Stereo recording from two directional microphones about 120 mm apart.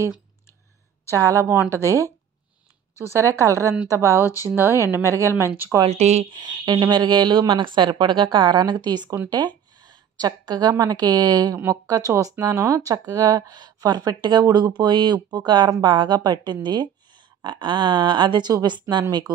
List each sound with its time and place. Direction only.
1.1 s a woman's voice: 25° right (ahead or behind)
5.8 s speech: 65° right (ahead or behind)
6.3 s a woman's voice: 35° right (ahead or behind)